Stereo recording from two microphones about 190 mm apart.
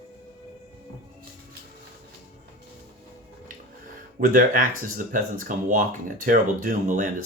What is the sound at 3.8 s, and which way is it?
Speech, 45° right (ahead or behind).